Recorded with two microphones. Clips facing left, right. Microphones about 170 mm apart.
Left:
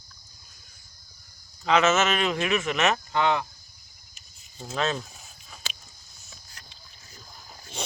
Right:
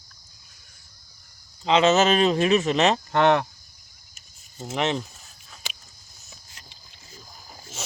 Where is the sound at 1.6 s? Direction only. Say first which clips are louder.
Right 3 dB; 30° right (ahead or behind).